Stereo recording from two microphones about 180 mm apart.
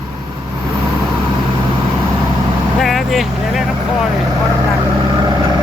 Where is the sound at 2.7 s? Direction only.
Centre (ahead or behind).